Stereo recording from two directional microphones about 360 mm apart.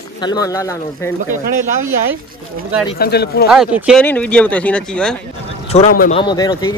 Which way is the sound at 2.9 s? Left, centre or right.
Left.